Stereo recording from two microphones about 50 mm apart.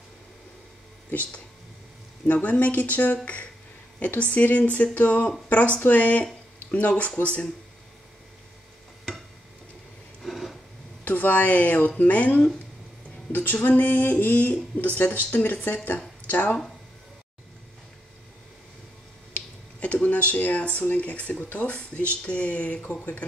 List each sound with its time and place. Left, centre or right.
2.2 s speech: left
4.2 s speech: left
10.2 s a sound: centre
11.1 s speech: left
19.3 s a sound: left
20.8 s speech: left